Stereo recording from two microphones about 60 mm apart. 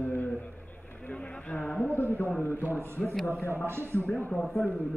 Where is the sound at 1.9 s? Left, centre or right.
Left.